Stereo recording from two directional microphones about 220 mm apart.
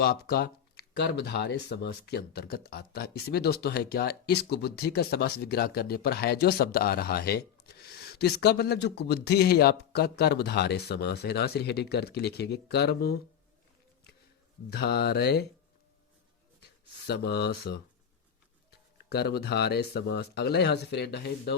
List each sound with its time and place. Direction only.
0.0 s speech: 45° left (ahead or behind)
14.7 s speech: 45° left (ahead or behind)
16.6 s speech: 50° left (ahead or behind)
19.0 s speech: 45° left (ahead or behind)